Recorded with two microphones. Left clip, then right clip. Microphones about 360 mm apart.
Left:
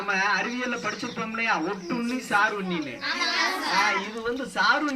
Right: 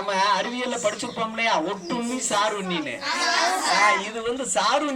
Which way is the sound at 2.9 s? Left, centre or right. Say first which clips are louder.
Right 4 dB; right.